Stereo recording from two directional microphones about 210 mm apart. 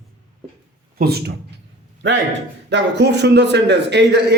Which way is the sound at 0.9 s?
50° right (ahead or behind).